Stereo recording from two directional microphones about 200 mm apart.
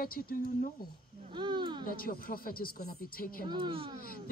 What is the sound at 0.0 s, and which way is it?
Speech, 45° left (ahead or behind).